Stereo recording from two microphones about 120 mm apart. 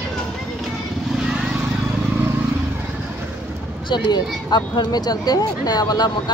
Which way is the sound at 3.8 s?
40° left (ahead or behind).